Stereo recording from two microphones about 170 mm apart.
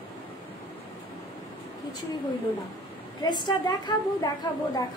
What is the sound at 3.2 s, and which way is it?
Speech, 25° left (ahead or behind).